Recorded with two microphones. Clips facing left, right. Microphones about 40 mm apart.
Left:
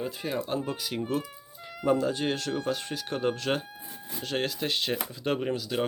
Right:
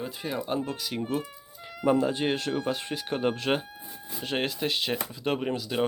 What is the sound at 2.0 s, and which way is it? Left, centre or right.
Speech, centre.